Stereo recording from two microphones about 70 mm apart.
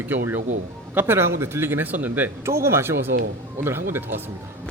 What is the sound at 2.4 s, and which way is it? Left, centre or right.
A man's voice, right.